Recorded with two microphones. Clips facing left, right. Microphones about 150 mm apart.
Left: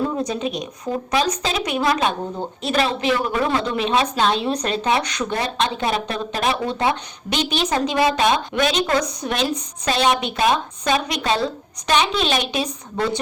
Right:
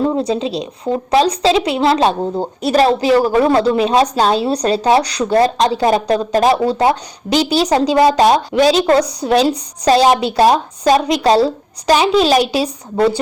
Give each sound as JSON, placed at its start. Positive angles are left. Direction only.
{"t": 0.0, "sound": "a woman's voice", "side_deg": -30}